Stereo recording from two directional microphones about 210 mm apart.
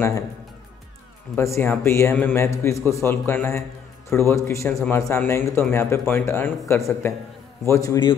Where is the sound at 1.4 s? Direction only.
10° left (ahead or behind).